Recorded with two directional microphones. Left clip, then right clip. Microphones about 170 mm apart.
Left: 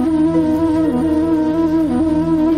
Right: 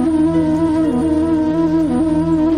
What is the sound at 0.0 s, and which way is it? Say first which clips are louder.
Music: even; centre (ahead or behind).